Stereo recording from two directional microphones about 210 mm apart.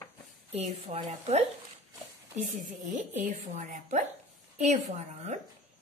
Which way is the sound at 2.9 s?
35° right (ahead or behind).